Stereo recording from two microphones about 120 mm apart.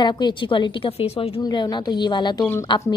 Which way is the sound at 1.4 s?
35° left (ahead or behind).